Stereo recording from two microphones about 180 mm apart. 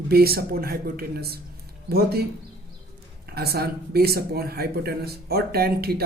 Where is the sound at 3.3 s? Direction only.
60° right (ahead or behind).